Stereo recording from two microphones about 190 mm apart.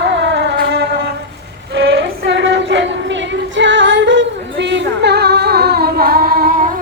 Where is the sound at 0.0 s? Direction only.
70° right (ahead or behind).